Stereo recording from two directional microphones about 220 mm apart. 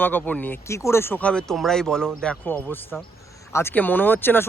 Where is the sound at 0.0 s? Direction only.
10° left (ahead or behind).